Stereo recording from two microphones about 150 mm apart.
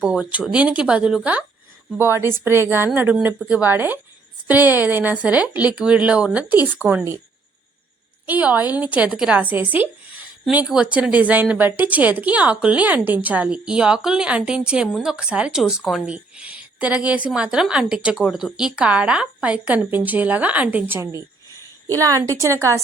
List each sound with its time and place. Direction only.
0.0 s a woman's voice: 5° right (ahead or behind)
8.3 s a woman's voice: 10° right (ahead or behind)